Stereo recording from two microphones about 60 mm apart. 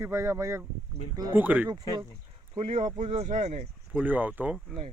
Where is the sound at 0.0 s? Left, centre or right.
Right.